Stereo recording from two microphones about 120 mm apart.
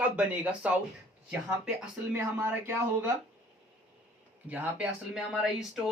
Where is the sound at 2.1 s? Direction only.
20° right (ahead or behind).